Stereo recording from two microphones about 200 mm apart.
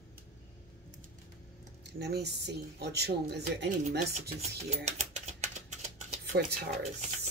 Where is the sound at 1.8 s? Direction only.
55° right (ahead or behind).